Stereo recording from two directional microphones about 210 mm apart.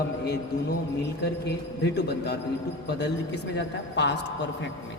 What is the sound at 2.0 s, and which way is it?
Speech, 50° left (ahead or behind).